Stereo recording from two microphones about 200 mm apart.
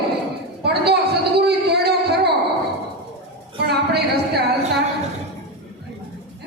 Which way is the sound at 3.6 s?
55° right (ahead or behind).